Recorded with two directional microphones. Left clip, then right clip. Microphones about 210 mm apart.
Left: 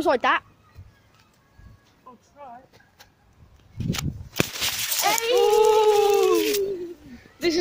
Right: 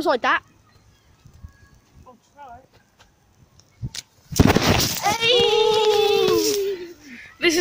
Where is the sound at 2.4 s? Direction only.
25° right (ahead or behind).